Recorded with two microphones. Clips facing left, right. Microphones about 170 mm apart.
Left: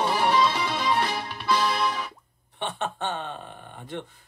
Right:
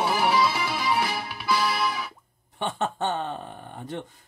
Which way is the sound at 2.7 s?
45° right (ahead or behind).